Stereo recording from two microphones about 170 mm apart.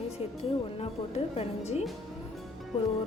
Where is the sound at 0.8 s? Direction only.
40° left (ahead or behind).